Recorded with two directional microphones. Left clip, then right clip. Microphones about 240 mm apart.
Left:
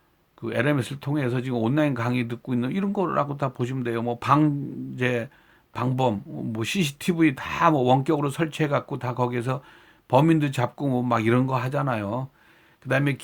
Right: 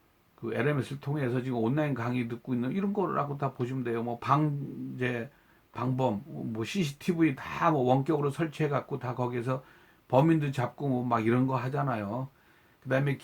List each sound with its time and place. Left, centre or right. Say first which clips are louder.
0.4 s speech: left 6 dB; left